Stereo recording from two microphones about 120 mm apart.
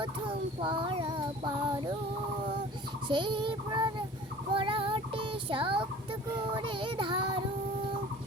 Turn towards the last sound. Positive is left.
turn(degrees=-45)  # may be behind; listen again after turning